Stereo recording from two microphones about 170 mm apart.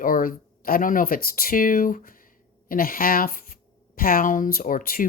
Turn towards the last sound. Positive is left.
turn(degrees=55)  # may be behind; listen again after turning